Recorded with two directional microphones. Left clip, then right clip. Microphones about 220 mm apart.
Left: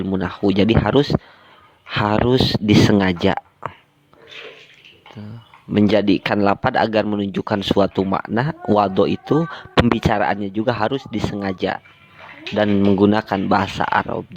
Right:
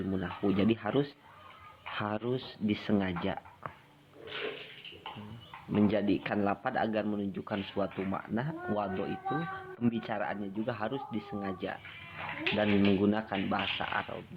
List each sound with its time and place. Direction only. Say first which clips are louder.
0.1 s speech: left 13 dB; 55° left (ahead or behind)
5.7 s speech: left 13 dB; 55° left (ahead or behind)